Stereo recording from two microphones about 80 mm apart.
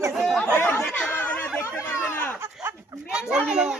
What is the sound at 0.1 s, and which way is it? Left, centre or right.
Chatter, centre.